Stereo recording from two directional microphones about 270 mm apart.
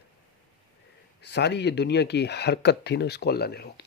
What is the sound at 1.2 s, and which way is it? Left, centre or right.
Speech, left.